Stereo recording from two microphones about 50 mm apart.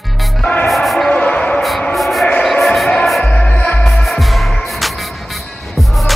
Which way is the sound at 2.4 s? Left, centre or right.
Centre.